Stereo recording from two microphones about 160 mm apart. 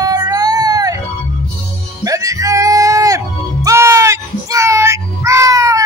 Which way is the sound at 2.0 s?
20° right (ahead or behind).